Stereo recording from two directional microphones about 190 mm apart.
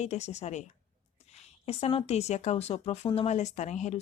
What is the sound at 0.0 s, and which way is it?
Speech, 35° left (ahead or behind).